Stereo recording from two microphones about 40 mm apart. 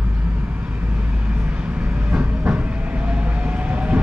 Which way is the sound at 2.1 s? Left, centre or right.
Right.